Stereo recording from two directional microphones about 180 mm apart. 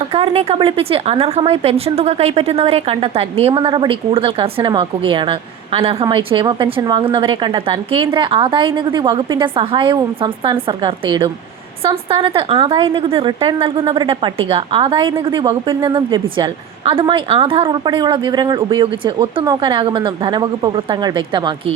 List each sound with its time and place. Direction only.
0.1 s speech: 35° right (ahead or behind)